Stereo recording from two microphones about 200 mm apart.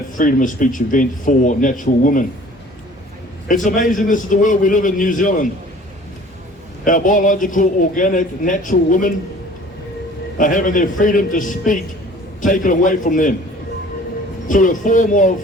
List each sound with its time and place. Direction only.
0.2 s a man's voice: 40° left (ahead or behind)
3.5 s a man's voice: 40° left (ahead or behind)
6.8 s a man's voice: 40° left (ahead or behind)
10.3 s a man's voice: 40° left (ahead or behind)
14.4 s a man's voice: 40° left (ahead or behind)